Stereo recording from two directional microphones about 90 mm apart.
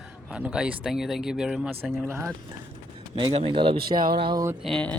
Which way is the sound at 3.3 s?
80° right.